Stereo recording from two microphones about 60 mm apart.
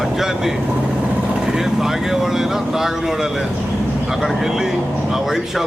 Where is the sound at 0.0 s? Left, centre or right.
Centre.